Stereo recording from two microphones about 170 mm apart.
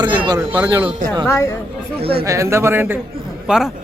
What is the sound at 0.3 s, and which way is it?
Speech, 15° right (ahead or behind).